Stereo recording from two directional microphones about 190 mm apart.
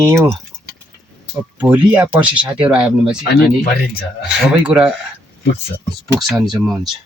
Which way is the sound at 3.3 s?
55° left (ahead or behind).